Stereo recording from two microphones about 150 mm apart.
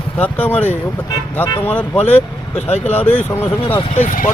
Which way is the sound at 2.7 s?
50° left (ahead or behind).